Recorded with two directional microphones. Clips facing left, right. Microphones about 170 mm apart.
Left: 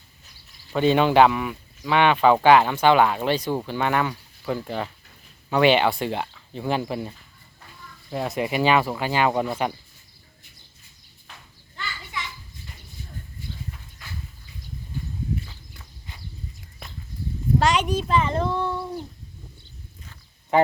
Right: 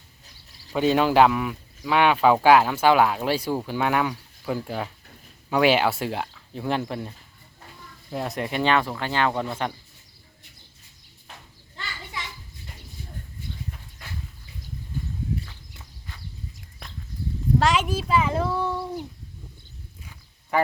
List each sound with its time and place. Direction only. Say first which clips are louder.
0.7 s speech: left 1 dB; 5° right (ahead or behind)
8.1 s speech: left 3 dB; centre (ahead or behind)
16.8 s a sound: left 1 dB; centre (ahead or behind)
17.6 s a child's voice: left 1 dB; centre (ahead or behind)
20.5 s quack: left 4 dB; 20° left (ahead or behind)